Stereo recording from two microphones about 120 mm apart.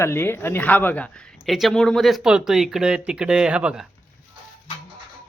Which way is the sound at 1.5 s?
Centre (ahead or behind).